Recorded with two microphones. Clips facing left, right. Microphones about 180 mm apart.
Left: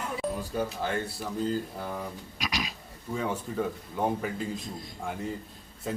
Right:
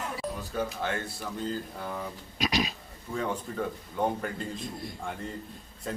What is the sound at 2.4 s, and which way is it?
Pig, 25° right (ahead or behind).